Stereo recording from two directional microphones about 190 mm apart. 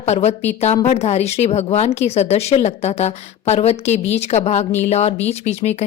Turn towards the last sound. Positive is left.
turn(degrees=35)  # may be behind; listen again after turning